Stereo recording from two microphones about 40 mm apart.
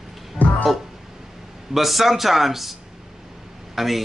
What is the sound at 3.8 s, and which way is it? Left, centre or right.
Speech, centre.